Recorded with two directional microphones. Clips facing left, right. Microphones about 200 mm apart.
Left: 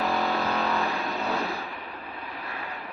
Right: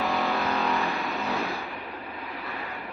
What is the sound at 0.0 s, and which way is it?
Vehicle, centre (ahead or behind).